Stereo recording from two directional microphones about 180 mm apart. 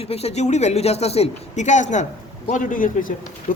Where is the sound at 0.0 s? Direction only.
35° left (ahead or behind).